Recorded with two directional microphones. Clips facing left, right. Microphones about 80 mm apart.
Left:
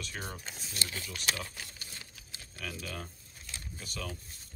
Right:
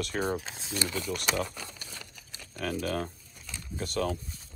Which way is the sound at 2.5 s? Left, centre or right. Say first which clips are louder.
Right 10 dB; right.